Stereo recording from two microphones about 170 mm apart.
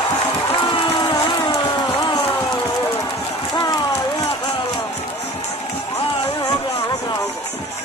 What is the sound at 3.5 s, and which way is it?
Run, 25° left (ahead or behind).